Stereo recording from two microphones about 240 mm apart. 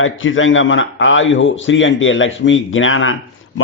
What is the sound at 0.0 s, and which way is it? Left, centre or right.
A man's voice, left.